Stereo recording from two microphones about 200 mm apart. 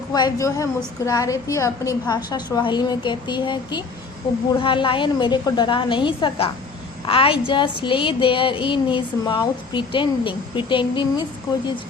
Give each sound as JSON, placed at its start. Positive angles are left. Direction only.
{"t": 0.1, "sound": "a woman's voice", "side_deg": 20}